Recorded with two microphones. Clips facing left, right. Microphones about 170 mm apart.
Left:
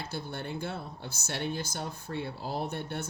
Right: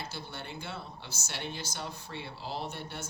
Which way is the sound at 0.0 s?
55° left (ahead or behind).